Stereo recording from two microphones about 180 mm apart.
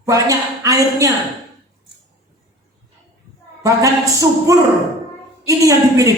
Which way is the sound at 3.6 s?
20° right (ahead or behind).